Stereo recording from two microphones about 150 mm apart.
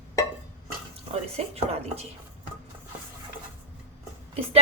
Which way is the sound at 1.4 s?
45° right (ahead or behind).